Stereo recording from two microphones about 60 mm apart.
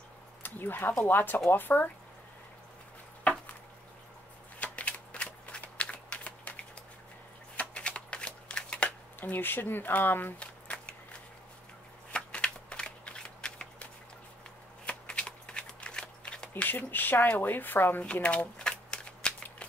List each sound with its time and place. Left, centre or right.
0.4 s speech: left
4.6 s shuffling cards: left
9.2 s speech: left
10.4 s a sound: centre
12.1 s shuffling cards: centre
14.9 s shuffling cards: centre
16.6 s speech: left
18.0 s shuffling cards: centre